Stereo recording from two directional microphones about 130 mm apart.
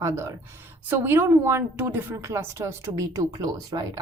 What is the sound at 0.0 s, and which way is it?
A woman's voice, 25° right (ahead or behind).